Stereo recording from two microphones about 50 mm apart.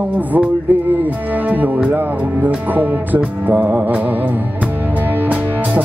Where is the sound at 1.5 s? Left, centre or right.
Right.